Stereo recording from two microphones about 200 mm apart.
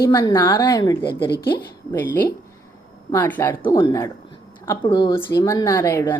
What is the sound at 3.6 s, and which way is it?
Speech, 20° left (ahead or behind).